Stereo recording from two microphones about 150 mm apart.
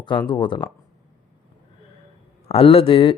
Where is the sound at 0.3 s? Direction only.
30° left (ahead or behind).